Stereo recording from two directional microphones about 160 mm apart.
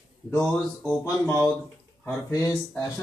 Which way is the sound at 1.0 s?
20° left (ahead or behind).